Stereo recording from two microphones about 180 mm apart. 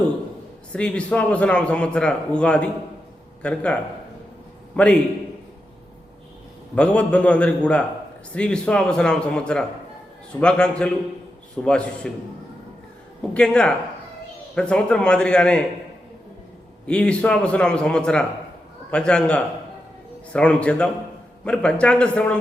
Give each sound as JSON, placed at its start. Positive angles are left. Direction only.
{"t": 0.7, "sound": "a man's voice", "side_deg": 5}
{"t": 4.8, "sound": "a man's voice", "side_deg": 5}
{"t": 6.7, "sound": "a man's voice", "side_deg": 5}
{"t": 13.3, "sound": "a man's voice", "side_deg": 5}
{"t": 16.8, "sound": "a man's voice", "side_deg": 5}